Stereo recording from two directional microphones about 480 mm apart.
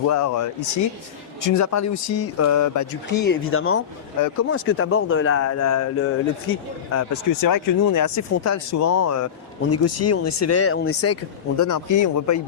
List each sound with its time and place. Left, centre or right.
0.1 s speech: left
3.1 s speech: left
6.9 s speech: left